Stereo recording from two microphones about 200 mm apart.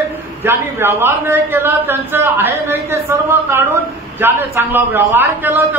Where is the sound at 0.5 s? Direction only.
10° right (ahead or behind).